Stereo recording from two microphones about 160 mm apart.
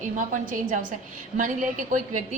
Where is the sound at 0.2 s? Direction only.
55° right (ahead or behind).